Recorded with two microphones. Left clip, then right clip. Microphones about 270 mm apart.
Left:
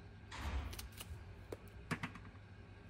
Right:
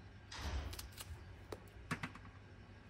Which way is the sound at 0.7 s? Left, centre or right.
Centre.